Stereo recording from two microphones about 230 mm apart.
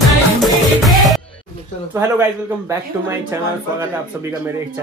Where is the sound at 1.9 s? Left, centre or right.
Centre.